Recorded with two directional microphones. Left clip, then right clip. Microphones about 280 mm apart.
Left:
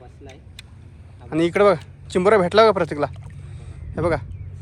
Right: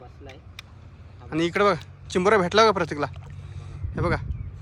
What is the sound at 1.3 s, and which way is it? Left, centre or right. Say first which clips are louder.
Speech: left 5 dB; centre.